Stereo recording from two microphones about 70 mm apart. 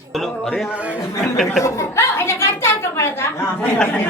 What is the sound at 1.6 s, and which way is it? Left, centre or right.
A woman's voice, left.